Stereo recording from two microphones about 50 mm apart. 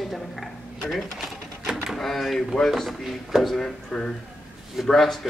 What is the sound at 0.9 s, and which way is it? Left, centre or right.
Cash register, centre.